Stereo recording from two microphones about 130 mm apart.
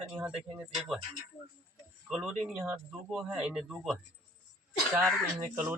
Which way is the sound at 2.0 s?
5° right (ahead or behind).